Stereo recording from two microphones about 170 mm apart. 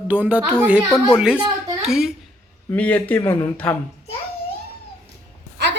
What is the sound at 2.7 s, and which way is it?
Speech, 10° left (ahead or behind).